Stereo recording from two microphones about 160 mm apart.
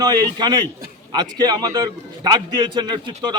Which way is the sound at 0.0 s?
25° right (ahead or behind).